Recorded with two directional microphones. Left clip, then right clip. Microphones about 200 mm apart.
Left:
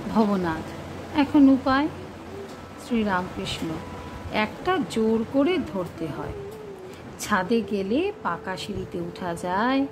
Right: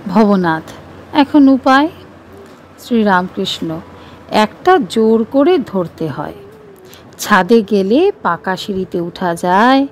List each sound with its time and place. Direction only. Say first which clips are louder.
0.1 s a woman's voice: right 12 dB; 40° right (ahead or behind)
2.9 s a woman's voice: right 13 dB; 45° right (ahead or behind)